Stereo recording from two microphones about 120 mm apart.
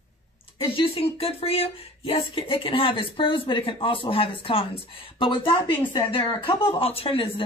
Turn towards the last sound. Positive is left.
turn(degrees=50)  # may be behind; listen again after turning